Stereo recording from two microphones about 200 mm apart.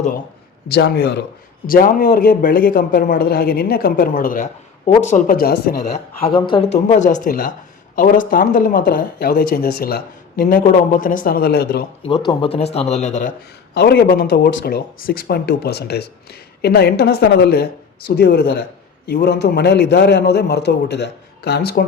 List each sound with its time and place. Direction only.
0.7 s a man's voice: 55° left (ahead or behind)
6.3 s speech: 25° left (ahead or behind)
6.8 s speech: 35° left (ahead or behind); by 11.9 s 50° left (ahead or behind)
12.3 s speech: 25° left (ahead or behind)
13.7 s a man's voice: 55° left (ahead or behind)